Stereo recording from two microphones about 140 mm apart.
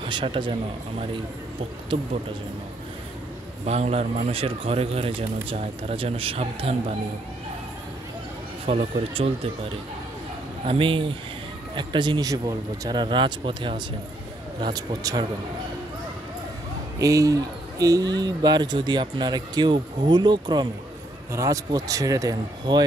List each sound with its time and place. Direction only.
0.1 s speech: 35° right (ahead or behind)
3.6 s speech: 50° right (ahead or behind)
8.6 s speech: 45° right (ahead or behind)
10.7 s speech: 40° right (ahead or behind)
17.0 s speech: 25° right (ahead or behind)
21.3 s speech: 20° right (ahead or behind)